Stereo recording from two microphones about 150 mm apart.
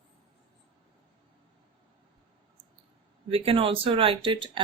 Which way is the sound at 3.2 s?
40° right (ahead or behind).